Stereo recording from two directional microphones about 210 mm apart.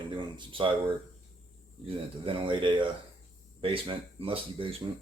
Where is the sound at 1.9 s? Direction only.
25° right (ahead or behind).